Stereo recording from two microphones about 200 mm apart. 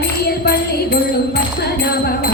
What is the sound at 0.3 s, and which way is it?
Music, 50° left (ahead or behind).